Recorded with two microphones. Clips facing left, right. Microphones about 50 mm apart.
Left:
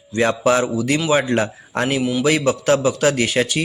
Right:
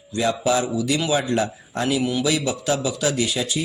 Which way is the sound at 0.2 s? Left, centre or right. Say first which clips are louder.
Left 4 dB; left.